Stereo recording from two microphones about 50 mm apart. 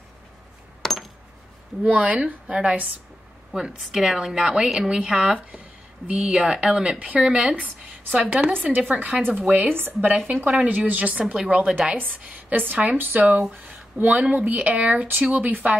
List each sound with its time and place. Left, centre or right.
0.8 s coin: centre
1.8 s speech: right
3.8 s a woman's voice: centre
8.1 s speech: right
9.7 s a woman's voice: right